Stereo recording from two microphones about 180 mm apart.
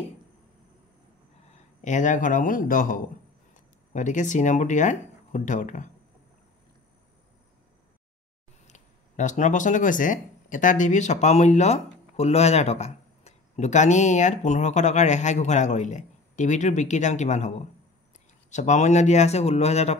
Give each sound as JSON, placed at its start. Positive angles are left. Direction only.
{"t": 1.8, "sound": "speech", "side_deg": 45}
{"t": 8.6, "sound": "speech", "side_deg": 40}